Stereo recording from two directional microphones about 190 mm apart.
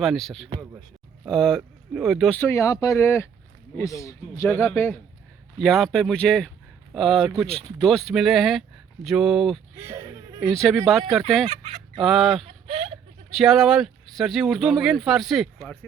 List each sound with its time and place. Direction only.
0.0 s speech: centre (ahead or behind)
2.4 s speech: 15° left (ahead or behind); by 9.6 s centre (ahead or behind)
9.7 s a sound: 15° right (ahead or behind)
10.5 s speech: centre (ahead or behind)
11.4 s speech: 30° right (ahead or behind)
11.9 s speech: centre (ahead or behind)
12.6 s speech: 30° right (ahead or behind)
13.3 s speech: centre (ahead or behind)